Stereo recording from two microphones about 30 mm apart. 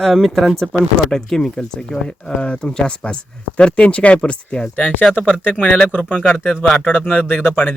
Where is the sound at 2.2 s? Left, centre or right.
Left.